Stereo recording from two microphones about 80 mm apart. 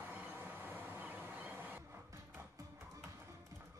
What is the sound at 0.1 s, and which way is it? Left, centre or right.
Vehicle, right.